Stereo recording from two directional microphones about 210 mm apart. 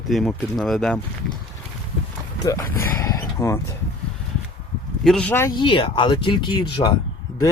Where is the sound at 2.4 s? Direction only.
15° left (ahead or behind).